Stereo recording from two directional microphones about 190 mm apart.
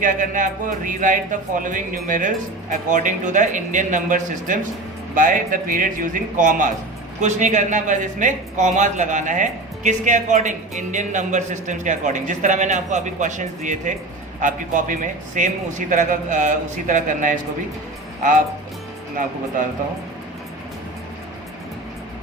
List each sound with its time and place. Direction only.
0.0 s a man's voice: 45° right (ahead or behind)